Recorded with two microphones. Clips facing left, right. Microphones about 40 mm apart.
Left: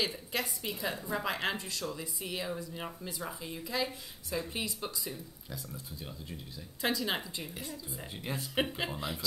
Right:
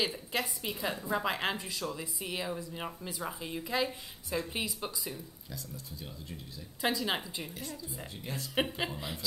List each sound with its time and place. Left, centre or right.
0.0 s speech: centre
6.8 s speech: centre
8.2 s speech: centre
8.5 s speech: centre